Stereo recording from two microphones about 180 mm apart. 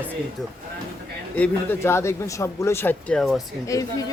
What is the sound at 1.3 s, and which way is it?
Speech, 10° left (ahead or behind).